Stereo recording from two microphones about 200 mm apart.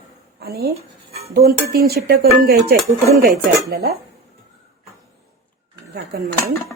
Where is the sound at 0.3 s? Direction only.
50° right (ahead or behind).